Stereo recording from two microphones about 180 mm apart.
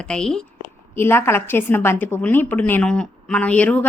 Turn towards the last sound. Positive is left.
turn(degrees=5)  # may be behind; listen again after turning